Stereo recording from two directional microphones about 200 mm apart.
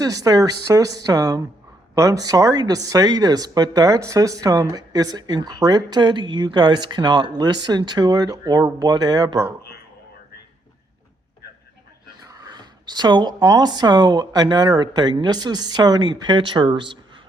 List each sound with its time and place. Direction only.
0.0 s a woman's voice: 20° right (ahead or behind)
12.2 s speech: 20° right (ahead or behind)